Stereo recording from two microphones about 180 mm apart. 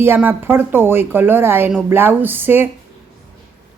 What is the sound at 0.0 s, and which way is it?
A woman's voice, 10° right (ahead or behind).